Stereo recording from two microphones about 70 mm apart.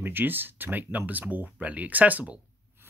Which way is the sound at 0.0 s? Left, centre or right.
Right.